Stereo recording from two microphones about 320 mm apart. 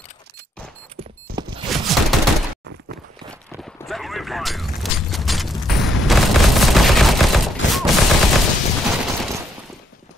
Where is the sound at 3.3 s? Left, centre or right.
Centre.